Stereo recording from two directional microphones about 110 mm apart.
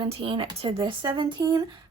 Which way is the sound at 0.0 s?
50° right (ahead or behind).